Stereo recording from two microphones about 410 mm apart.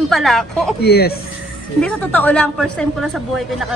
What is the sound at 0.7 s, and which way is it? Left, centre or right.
Speech, left.